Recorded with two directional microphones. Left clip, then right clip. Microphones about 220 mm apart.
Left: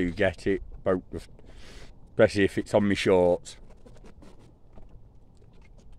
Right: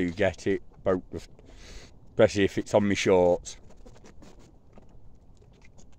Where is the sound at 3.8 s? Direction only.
15° right (ahead or behind).